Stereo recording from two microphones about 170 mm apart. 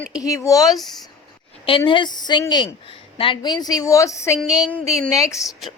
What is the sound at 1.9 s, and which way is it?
Speech, 25° left (ahead or behind).